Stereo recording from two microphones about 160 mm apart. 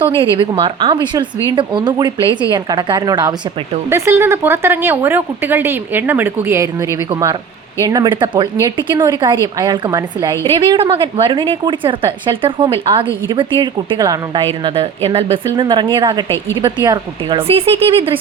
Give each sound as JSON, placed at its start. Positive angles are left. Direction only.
{"t": 0.2, "sound": "a woman's voice", "side_deg": -35}